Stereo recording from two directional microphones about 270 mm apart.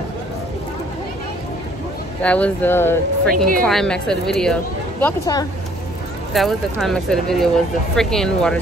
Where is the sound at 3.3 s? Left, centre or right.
Right.